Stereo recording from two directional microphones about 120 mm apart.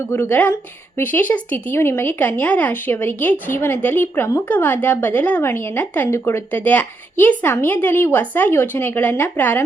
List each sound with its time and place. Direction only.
0.1 s speech: 20° left (ahead or behind)